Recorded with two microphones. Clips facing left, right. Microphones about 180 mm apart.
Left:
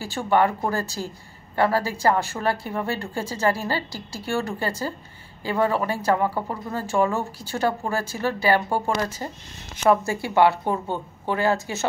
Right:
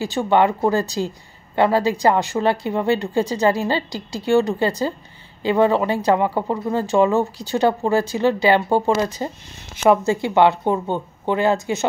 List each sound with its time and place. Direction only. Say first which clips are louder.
0.0 s a woman's voice: right 4 dB; 20° right (ahead or behind)